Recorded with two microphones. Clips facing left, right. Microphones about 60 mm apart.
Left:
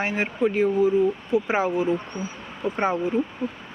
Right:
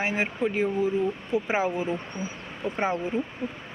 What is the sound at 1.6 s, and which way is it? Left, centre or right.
Speech, centre.